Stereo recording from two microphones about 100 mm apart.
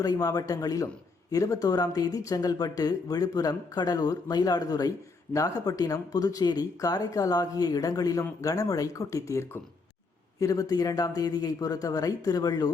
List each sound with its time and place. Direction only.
0.0 s speech: 40° left (ahead or behind)